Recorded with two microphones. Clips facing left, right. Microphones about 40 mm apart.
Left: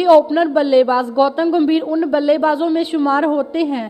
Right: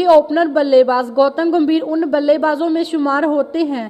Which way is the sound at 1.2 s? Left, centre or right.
Centre.